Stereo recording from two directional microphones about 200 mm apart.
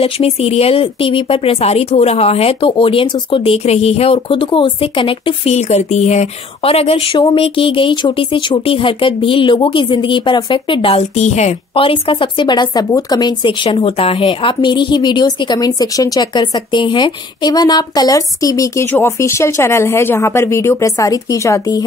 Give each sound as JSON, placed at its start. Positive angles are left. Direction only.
{"t": 0.0, "sound": "speech", "side_deg": 30}